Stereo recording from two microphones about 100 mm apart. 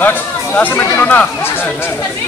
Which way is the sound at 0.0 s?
20° left (ahead or behind).